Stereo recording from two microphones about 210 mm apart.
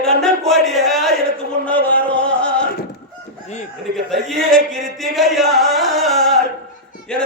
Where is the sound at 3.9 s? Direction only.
Centre (ahead or behind).